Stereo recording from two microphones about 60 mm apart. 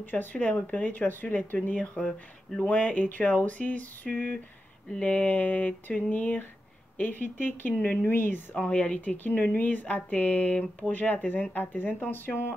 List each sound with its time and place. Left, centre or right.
0.0 s speech: left
8.5 s speech: centre; by 12.5 s left